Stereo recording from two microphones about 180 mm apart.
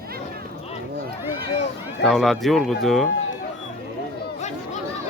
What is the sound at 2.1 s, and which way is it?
Speech, centre (ahead or behind).